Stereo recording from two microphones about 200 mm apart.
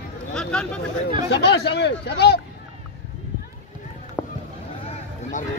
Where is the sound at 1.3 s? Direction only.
55° left (ahead or behind).